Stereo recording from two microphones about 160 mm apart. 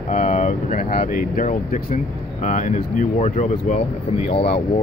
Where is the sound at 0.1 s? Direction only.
50° left (ahead or behind).